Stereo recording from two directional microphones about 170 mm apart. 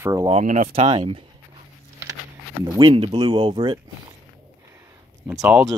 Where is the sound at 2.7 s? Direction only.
30° right (ahead or behind).